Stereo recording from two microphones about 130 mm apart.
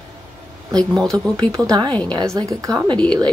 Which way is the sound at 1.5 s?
30° right (ahead or behind).